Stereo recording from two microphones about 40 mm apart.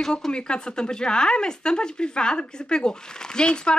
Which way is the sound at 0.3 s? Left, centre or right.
Left.